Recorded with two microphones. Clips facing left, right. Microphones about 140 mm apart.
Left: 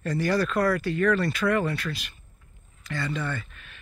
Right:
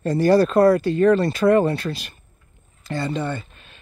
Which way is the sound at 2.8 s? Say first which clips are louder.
Right 6 dB; 30° right (ahead or behind).